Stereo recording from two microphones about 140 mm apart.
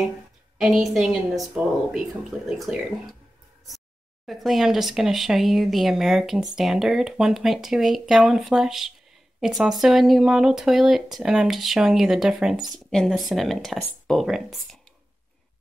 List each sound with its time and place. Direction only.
0.6 s speech: centre (ahead or behind)
4.3 s speech: centre (ahead or behind)